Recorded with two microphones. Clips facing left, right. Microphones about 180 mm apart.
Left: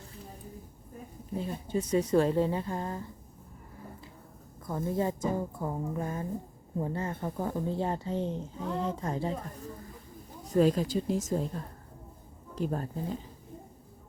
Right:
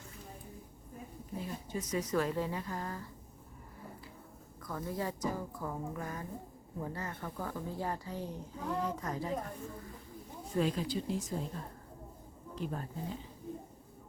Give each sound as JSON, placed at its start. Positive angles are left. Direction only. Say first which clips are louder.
{"t": 1.4, "sound": "speech", "louder": "left 7 dB", "side_deg": 30}
{"t": 4.6, "sound": "speech", "louder": "left 7 dB", "side_deg": 25}
{"t": 10.4, "sound": "a woman's voice", "louder": "left 8 dB", "side_deg": 40}
{"t": 12.5, "sound": "speech", "louder": "left 7 dB", "side_deg": 40}